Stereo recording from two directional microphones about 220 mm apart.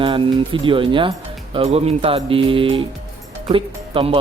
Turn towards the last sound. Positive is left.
turn(degrees=-25)  # may be behind; listen again after turning